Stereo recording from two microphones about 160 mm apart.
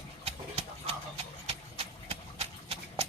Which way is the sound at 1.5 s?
35° right (ahead or behind).